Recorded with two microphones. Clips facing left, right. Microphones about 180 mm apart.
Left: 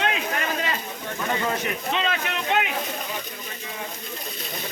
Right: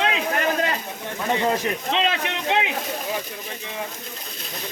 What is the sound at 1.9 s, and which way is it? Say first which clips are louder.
Speech: right 2 dB; 25° right (ahead or behind).